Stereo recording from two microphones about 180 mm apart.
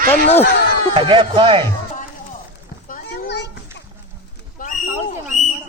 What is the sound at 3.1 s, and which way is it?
Children playing, 70° left (ahead or behind).